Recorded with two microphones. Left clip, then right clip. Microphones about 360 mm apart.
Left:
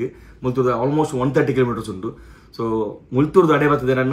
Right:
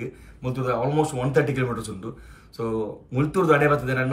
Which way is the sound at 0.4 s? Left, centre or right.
Right.